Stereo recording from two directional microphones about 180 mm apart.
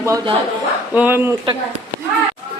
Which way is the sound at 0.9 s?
10° right (ahead or behind).